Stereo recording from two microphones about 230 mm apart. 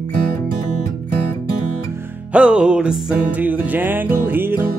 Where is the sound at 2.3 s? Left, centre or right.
Centre.